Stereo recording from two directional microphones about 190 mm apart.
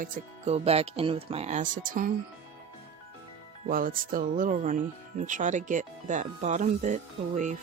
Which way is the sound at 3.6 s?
45° right (ahead or behind).